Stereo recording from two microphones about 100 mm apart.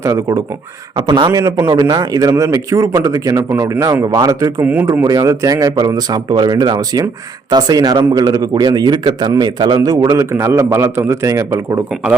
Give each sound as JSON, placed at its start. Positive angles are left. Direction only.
{"t": 0.0, "sound": "speech", "side_deg": -35}
{"t": 0.9, "sound": "a man's voice", "side_deg": -50}
{"t": 1.3, "sound": "speech", "side_deg": -35}
{"t": 4.6, "sound": "speech", "side_deg": -15}
{"t": 5.0, "sound": "speech", "side_deg": -35}